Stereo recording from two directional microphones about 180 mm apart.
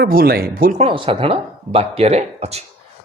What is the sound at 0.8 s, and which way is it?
Speech, 30° right (ahead or behind).